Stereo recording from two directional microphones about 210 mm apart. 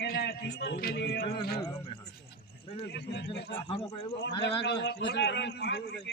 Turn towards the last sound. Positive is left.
turn(degrees=50)  # may be behind; listen again after turning